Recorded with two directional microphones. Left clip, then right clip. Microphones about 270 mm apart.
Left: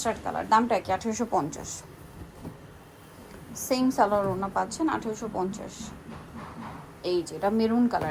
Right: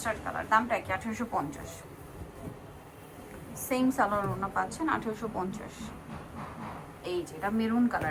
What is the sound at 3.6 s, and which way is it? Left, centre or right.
A woman's voice, centre.